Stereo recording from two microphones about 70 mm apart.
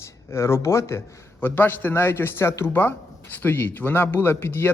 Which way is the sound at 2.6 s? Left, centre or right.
Left.